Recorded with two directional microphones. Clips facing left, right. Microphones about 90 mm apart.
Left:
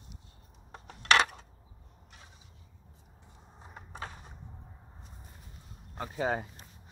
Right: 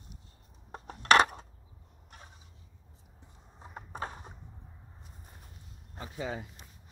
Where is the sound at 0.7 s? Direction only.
40° right (ahead or behind).